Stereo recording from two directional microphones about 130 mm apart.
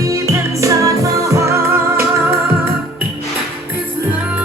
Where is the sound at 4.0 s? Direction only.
15° right (ahead or behind).